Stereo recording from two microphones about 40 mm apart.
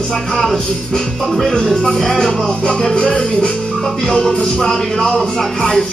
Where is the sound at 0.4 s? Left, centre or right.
Centre.